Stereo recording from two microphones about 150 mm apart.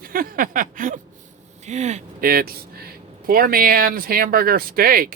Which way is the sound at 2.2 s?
85° right.